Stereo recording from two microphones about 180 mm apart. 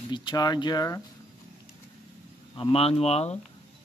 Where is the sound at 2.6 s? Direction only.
30° left (ahead or behind).